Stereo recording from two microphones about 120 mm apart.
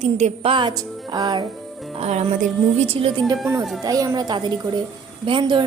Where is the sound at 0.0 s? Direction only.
60° right (ahead or behind).